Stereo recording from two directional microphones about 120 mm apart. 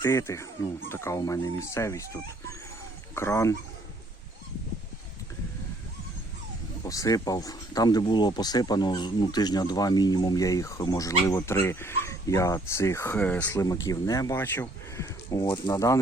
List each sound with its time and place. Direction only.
0.0 s speech: 25° left (ahead or behind)
3.2 s speech: 25° left (ahead or behind)
6.8 s speech: 30° left (ahead or behind)
13.1 s speech: 15° left (ahead or behind)
13.6 s speech: 25° left (ahead or behind)
14.4 s speech: 15° left (ahead or behind)
15.4 s speech: 45° left (ahead or behind)
15.7 s speech: 25° left (ahead or behind)